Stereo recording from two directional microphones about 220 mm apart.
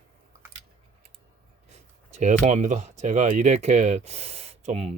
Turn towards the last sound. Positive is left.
turn(degrees=-30)  # may be behind; listen again after turning